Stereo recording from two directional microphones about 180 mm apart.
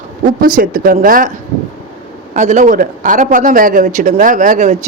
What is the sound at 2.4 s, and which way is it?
Speech, 45° right (ahead or behind).